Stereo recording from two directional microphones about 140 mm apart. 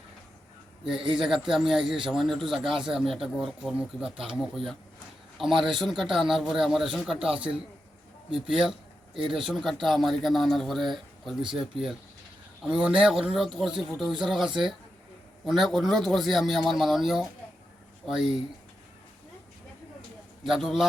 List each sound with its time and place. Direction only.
1.1 s speech: centre (ahead or behind)
9.1 s speech: 40° right (ahead or behind)
9.4 s speech: centre (ahead or behind)
20.4 s speech: centre (ahead or behind)